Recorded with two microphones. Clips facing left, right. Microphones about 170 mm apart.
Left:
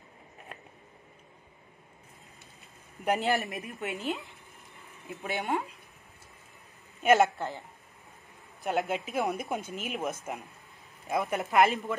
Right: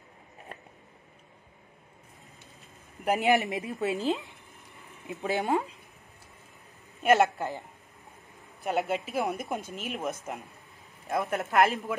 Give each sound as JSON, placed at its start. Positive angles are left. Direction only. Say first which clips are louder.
{"t": 3.2, "sound": "speech", "louder": "right 4 dB", "side_deg": -15}
{"t": 3.8, "sound": "speech", "louder": "right 6 dB", "side_deg": -35}
{"t": 5.2, "sound": "speech", "louder": "right 5 dB", "side_deg": -35}
{"t": 7.0, "sound": "a woman's voice", "louder": "even", "side_deg": 0}
{"t": 7.3, "sound": "speech", "louder": "right 2 dB", "side_deg": -15}
{"t": 8.6, "sound": "speech", "louder": "right 1 dB", "side_deg": 0}